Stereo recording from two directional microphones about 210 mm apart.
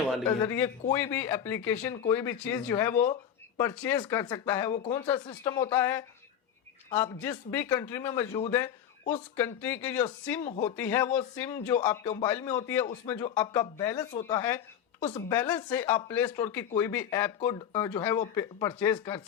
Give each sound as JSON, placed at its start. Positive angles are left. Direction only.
{"t": 0.3, "sound": "a man's voice", "side_deg": 15}
{"t": 15.4, "sound": "speech", "side_deg": 10}